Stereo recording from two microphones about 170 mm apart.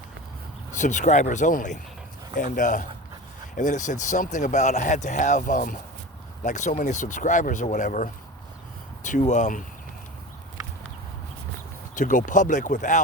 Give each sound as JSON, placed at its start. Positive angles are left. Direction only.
{"t": 0.7, "sound": "speech", "side_deg": 45}
{"t": 11.9, "sound": "speech", "side_deg": 50}